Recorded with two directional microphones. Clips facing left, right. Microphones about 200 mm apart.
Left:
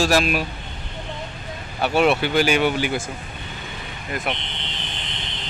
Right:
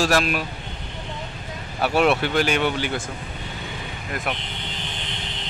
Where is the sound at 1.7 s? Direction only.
Centre (ahead or behind).